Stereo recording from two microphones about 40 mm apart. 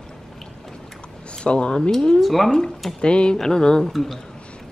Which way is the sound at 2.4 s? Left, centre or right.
Centre.